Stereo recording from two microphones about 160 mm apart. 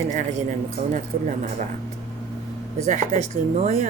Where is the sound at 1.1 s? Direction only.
60° right (ahead or behind).